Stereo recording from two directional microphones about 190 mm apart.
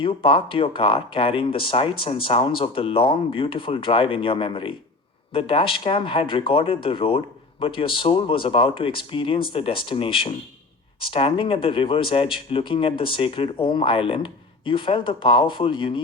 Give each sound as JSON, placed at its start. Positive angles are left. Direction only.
{"t": 0.0, "sound": "speech", "side_deg": 30}